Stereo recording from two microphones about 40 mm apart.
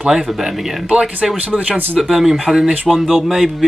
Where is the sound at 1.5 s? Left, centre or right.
Right.